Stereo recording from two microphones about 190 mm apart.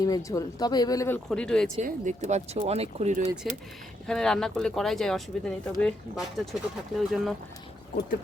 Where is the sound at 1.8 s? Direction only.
40° right (ahead or behind).